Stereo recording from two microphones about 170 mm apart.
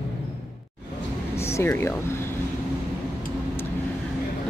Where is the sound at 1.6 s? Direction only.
15° left (ahead or behind).